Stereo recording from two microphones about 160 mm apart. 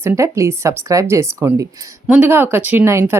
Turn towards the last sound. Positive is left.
turn(degrees=-15)  # may be behind; listen again after turning